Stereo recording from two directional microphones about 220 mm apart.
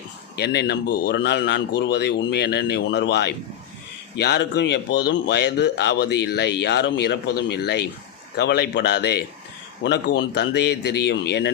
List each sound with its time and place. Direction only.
0.3 s speech: 50° left (ahead or behind)